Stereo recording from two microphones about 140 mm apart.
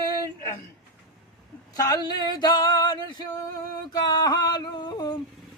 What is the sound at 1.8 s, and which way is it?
Male singing, 30° left (ahead or behind).